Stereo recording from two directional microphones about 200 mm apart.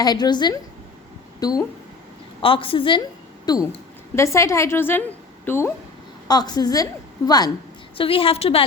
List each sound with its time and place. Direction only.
0.0 s a woman's voice: 20° left (ahead or behind)